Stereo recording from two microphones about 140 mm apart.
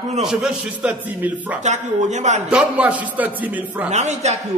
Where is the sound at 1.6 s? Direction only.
55° right (ahead or behind).